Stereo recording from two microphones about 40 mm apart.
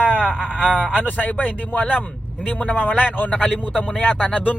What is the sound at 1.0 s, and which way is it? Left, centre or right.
Speech, left.